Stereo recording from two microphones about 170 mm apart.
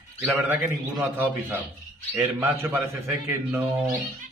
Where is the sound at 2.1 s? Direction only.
10° right (ahead or behind).